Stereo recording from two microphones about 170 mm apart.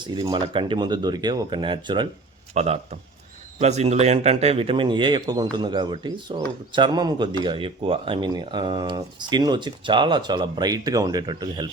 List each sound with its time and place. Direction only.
0.0 s speech: 25° right (ahead or behind)
2.6 s a man's voice: 40° right (ahead or behind)